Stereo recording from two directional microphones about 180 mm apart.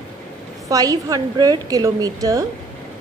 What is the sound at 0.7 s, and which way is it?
A woman's voice, 20° right (ahead or behind).